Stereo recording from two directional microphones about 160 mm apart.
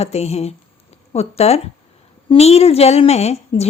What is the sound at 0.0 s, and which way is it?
Speech, 40° left (ahead or behind).